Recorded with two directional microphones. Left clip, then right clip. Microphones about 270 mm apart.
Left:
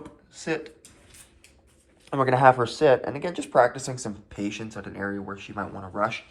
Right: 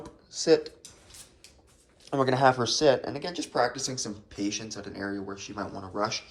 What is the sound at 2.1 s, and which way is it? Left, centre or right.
Speech, centre.